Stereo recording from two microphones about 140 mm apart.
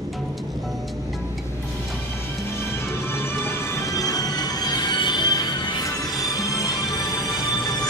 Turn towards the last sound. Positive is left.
turn(degrees=30)  # may be behind; listen again after turning